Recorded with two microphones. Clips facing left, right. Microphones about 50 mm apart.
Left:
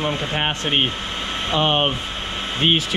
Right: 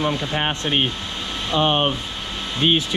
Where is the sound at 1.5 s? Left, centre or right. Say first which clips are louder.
Even; left.